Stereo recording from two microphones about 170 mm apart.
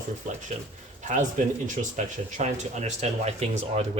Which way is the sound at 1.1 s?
45° right (ahead or behind).